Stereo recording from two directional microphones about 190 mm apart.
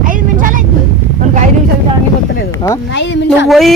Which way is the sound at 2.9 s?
70° left (ahead or behind).